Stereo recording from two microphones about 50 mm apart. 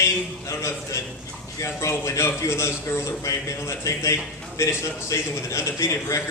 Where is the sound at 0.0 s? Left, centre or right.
Left.